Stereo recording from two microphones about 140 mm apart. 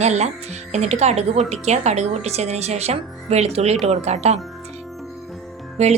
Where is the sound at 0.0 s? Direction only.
55° right (ahead or behind).